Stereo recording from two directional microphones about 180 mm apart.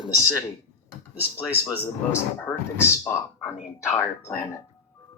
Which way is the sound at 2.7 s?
15° left (ahead or behind).